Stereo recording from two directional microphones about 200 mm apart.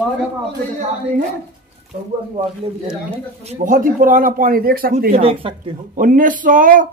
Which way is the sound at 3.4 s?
40° right (ahead or behind).